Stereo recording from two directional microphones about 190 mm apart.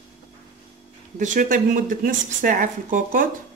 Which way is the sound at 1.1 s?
40° right (ahead or behind).